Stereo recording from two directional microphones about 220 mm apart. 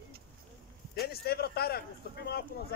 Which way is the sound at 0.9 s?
45° left (ahead or behind).